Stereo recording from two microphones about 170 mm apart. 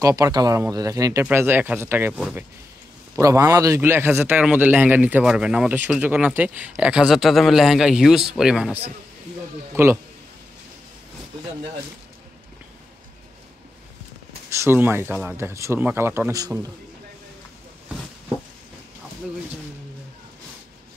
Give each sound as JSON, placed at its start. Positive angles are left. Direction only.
{"t": 0.0, "sound": "speech", "side_deg": -20}
{"t": 3.2, "sound": "speech", "side_deg": -20}
{"t": 9.8, "sound": "speech", "side_deg": -15}
{"t": 14.6, "sound": "speech", "side_deg": -15}